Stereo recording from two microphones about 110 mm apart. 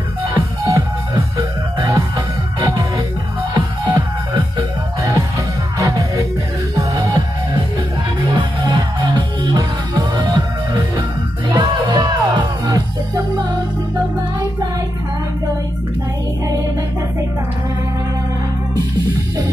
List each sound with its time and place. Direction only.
0.7 s music: 30° right (ahead or behind)
8.4 s music: 45° right (ahead or behind)